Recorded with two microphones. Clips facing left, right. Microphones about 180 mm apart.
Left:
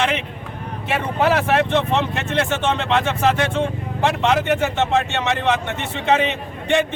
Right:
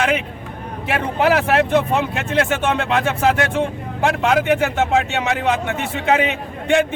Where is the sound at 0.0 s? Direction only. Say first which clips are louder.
Right 2 dB; 5° right (ahead or behind).